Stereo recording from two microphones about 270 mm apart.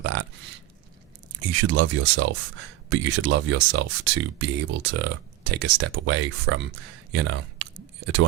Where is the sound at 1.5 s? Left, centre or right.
Right.